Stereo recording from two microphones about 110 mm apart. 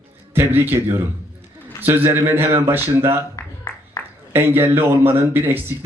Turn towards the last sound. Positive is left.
turn(degrees=-20)  # may be behind; listen again after turning